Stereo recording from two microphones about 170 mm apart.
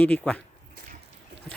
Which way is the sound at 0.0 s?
5° left (ahead or behind).